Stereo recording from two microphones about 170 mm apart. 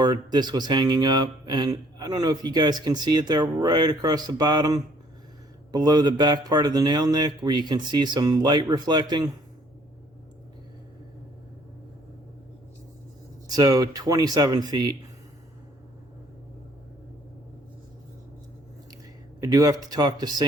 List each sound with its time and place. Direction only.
0.0 s speech: 25° right (ahead or behind)
13.6 s speech: 20° right (ahead or behind)
19.4 s speech: 20° right (ahead or behind)